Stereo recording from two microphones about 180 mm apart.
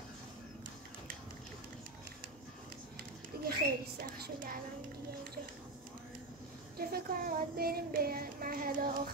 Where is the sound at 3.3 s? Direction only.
60° right (ahead or behind).